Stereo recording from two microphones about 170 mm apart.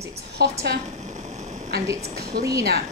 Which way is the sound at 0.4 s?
75° right (ahead or behind).